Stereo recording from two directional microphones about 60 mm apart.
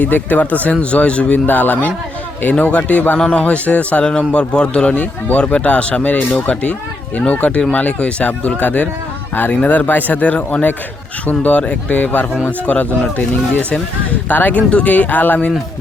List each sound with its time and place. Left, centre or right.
0.0 s speech: left